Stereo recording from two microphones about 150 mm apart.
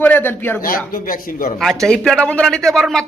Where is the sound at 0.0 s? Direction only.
15° left (ahead or behind).